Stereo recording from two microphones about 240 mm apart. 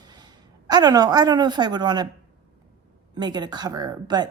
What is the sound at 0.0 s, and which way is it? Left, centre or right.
A woman's voice, centre.